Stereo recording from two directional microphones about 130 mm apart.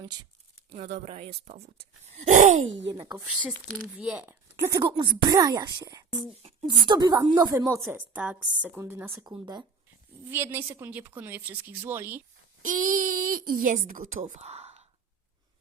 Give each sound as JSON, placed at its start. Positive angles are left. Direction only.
{"t": 0.0, "sound": "speech", "side_deg": -30}
{"t": 0.7, "sound": "speech", "side_deg": -55}
{"t": 3.7, "sound": "speech", "side_deg": -5}
{"t": 4.8, "sound": "a woman's voice", "side_deg": -35}
{"t": 10.2, "sound": "a woman's voice", "side_deg": -15}
{"t": 12.6, "sound": "speech", "side_deg": -90}